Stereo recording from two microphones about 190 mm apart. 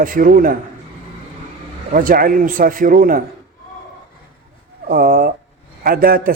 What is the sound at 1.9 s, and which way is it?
Speech, 45° right (ahead or behind).